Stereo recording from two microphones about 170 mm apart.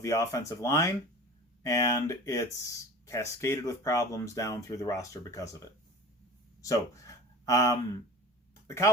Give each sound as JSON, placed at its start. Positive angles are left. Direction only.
{"t": 0.0, "sound": "speech", "side_deg": 20}